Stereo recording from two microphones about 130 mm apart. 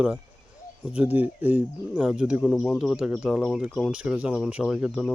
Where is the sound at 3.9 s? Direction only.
10° right (ahead or behind).